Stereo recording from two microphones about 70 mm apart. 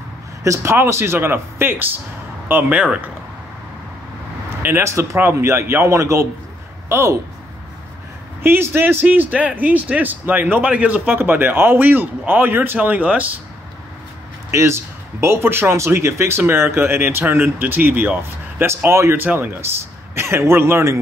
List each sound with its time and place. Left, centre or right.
0.6 s speech: right
2.7 s speech: centre
4.5 s speech: right
8.4 s speech: right
14.5 s speech: right
18.9 s speech: right